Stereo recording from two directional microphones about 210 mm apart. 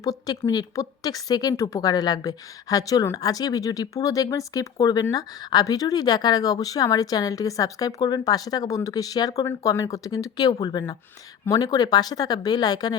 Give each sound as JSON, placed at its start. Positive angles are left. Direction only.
{"t": 0.0, "sound": "a woman's voice", "side_deg": 15}